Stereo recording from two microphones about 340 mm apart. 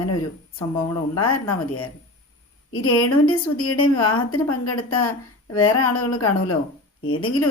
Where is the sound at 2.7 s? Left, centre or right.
Left.